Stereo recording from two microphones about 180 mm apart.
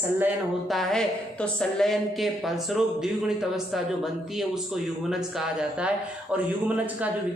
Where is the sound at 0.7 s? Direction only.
Centre (ahead or behind).